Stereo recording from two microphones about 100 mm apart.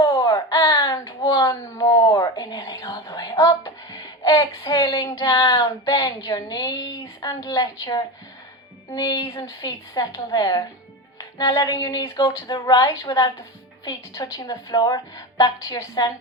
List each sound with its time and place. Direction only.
0.0 s baby cry: 40° left (ahead or behind)
5.4 s speech: 40° left (ahead or behind)